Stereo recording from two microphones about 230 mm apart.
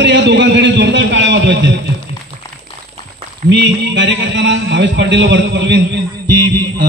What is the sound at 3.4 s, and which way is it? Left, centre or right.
Speech, right.